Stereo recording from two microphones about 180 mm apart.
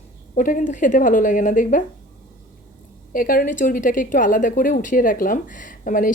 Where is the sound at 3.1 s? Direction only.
50° left (ahead or behind).